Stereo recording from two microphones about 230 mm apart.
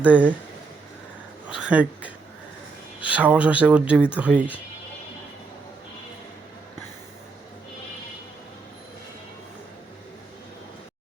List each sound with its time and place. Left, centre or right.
0.0 s speech: centre
1.5 s speech: centre